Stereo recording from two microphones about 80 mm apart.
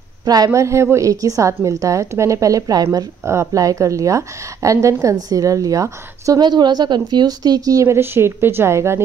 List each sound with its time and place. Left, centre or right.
0.2 s a man's voice: right
0.5 s a woman's voice: right
3.3 s a woman's voice: right
6.4 s speech: right